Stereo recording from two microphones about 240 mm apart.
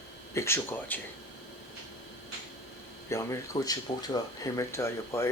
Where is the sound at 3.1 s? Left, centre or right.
Centre.